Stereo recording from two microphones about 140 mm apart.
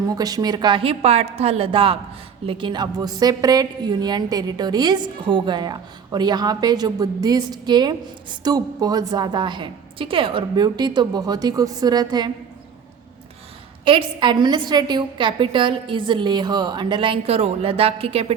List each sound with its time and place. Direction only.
0.1 s a woman's voice: 25° right (ahead or behind)
13.8 s a woman's voice: 35° right (ahead or behind)